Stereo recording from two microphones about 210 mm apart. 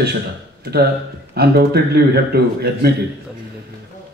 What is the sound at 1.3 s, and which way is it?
A man's voice, 50° right (ahead or behind).